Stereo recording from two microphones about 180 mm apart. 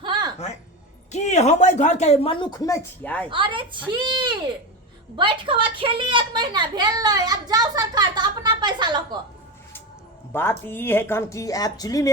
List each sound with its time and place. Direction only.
0.0 s a sound: 25° right (ahead or behind)
1.1 s speech: 40° left (ahead or behind); by 3.2 s 10° left (ahead or behind)
3.2 s a woman's voice: 30° right (ahead or behind)
10.3 s speech: 10° left (ahead or behind)